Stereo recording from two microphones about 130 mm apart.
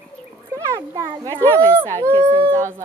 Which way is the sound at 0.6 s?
25° right (ahead or behind).